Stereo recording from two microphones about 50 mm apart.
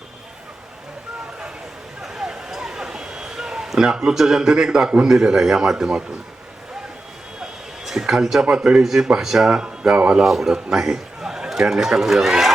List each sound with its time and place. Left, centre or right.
2.0 s a sound: centre
5.0 s a man's voice: centre
7.4 s a sound: centre
8.4 s a man's voice: right
8.8 s a man's voice: centre
10.2 s a man's voice: centre